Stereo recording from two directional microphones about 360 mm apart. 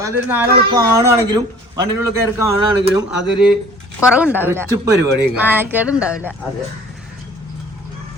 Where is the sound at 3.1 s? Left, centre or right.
Left.